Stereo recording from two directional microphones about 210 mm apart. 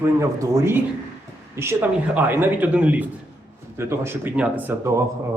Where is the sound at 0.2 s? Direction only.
15° right (ahead or behind).